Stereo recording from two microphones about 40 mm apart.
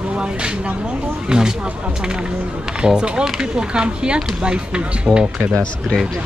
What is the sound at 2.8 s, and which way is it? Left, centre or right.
Speech, right.